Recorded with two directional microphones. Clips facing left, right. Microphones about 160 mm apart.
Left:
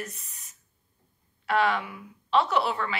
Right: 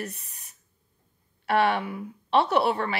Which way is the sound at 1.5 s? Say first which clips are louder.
Right 2 dB; 60° right (ahead or behind).